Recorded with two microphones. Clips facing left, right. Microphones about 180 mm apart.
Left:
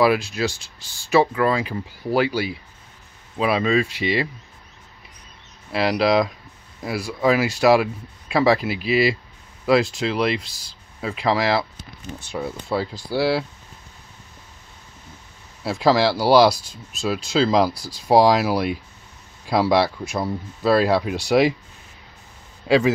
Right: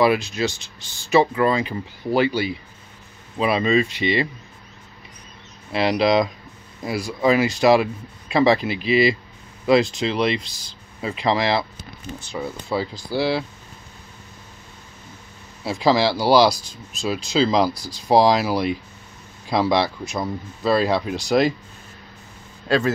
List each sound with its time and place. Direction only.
0.0 s speech: 5° left (ahead or behind)
5.7 s speech: 5° left (ahead or behind)
15.6 s speech: centre (ahead or behind)
22.7 s speech: 10° left (ahead or behind)